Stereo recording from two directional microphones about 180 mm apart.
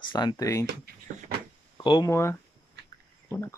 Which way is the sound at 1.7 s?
25° left (ahead or behind).